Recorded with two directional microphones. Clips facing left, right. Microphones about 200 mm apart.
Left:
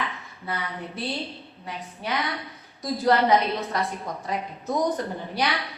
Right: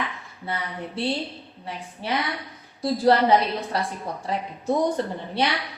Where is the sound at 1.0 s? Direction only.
30° right (ahead or behind).